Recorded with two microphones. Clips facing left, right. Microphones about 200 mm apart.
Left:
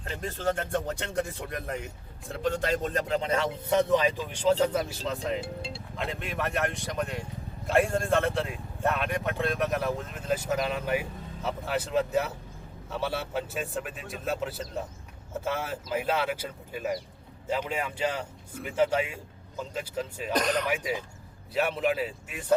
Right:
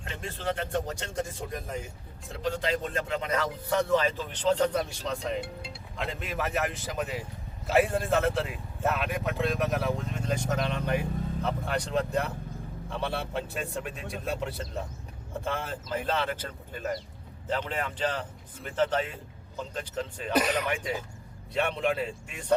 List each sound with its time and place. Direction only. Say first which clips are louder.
0.0 s speech: left 4 dB; 40° left (ahead or behind); by 1.8 s 65° left (ahead or behind)
2.4 s a man's voice: left 2 dB; 50° left (ahead or behind); by 20.3 s 5° left (ahead or behind)
20.3 s speech: right 1 dB; 5° right (ahead or behind)
20.7 s speech: left 1 dB; 5° left (ahead or behind)